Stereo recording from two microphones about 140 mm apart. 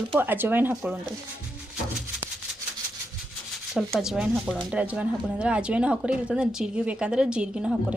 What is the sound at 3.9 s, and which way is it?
A woman's voice, 5° right (ahead or behind).